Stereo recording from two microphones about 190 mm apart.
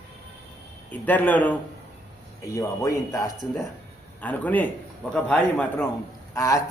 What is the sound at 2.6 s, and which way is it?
A man's voice, 15° left (ahead or behind).